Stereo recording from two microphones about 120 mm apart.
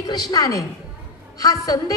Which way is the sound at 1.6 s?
30° left (ahead or behind).